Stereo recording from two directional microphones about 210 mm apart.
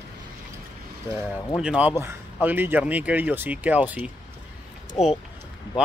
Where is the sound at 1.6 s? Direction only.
5° right (ahead or behind).